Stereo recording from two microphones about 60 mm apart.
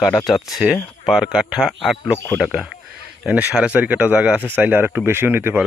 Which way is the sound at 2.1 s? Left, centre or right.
Left.